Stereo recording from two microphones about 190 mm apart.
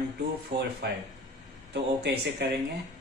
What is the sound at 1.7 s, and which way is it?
Speech, 65° right (ahead or behind).